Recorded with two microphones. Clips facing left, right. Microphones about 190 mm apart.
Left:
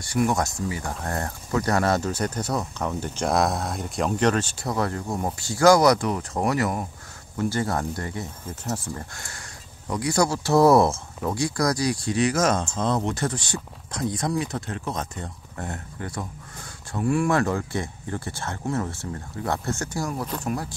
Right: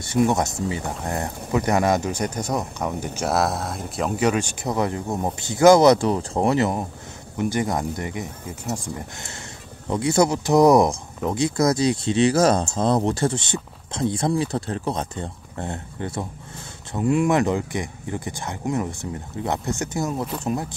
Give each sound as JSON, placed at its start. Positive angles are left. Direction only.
{"t": 0.0, "sound": "speech", "side_deg": -25}